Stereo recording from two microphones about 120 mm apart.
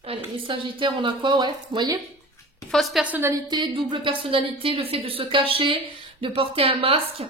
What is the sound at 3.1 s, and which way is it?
Speech, 15° right (ahead or behind).